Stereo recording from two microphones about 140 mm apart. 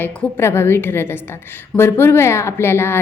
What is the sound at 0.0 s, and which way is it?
A woman's voice, 15° left (ahead or behind).